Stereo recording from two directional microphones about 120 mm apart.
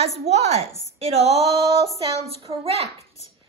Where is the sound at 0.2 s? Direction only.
60° right (ahead or behind).